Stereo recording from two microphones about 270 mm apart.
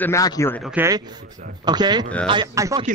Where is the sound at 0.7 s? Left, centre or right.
Centre.